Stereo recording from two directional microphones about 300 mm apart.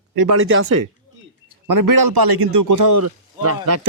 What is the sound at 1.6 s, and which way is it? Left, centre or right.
A man's voice, right.